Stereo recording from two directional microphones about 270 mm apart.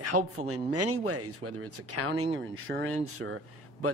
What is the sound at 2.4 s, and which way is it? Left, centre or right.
Speech, right.